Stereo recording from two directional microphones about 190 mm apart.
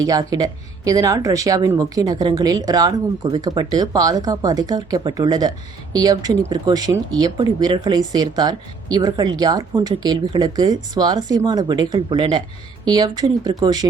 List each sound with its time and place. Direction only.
0.0 s speech: 20° right (ahead or behind)